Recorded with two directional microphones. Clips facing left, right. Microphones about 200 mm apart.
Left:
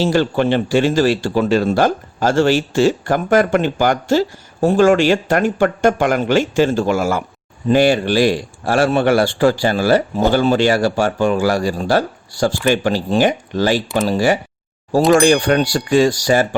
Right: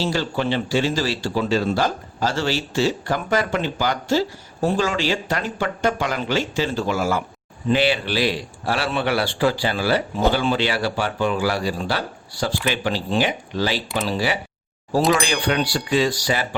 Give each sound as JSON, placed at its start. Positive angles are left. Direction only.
{"t": 0.0, "sound": "speech", "side_deg": 55}